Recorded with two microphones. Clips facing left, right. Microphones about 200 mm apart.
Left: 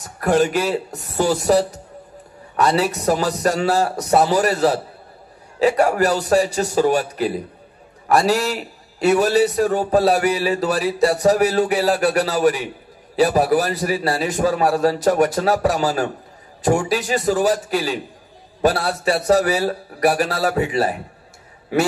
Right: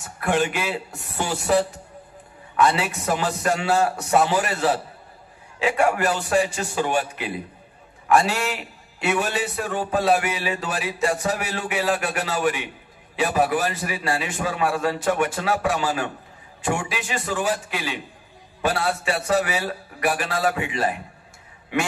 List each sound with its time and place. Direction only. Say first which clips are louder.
0.0 s a man's voice: left 5 dB; 40° left (ahead or behind)